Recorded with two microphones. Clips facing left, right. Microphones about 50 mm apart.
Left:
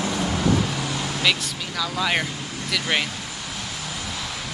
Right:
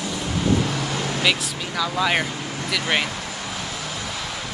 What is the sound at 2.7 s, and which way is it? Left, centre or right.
Speech, centre.